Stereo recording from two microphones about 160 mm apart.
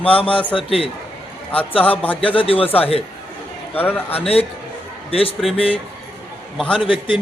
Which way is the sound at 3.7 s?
10° left (ahead or behind).